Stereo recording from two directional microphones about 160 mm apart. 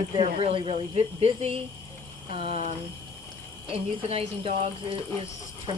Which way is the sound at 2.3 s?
40° right (ahead or behind).